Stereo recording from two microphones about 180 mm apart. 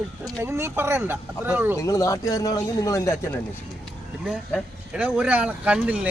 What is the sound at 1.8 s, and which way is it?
Speech, 15° left (ahead or behind).